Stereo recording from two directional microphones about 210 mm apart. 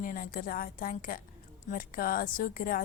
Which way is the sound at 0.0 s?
40° left (ahead or behind).